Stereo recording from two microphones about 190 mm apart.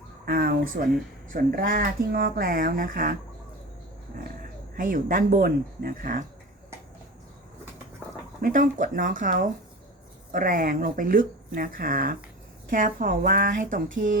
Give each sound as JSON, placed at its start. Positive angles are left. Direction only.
{"t": 0.3, "sound": "speech", "side_deg": -50}
{"t": 4.8, "sound": "speech", "side_deg": -45}
{"t": 8.4, "sound": "speech", "side_deg": -45}